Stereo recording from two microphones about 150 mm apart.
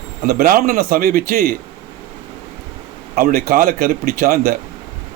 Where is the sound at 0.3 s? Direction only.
80° right.